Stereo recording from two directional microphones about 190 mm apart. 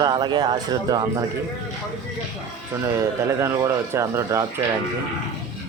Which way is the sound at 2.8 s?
15° right (ahead or behind).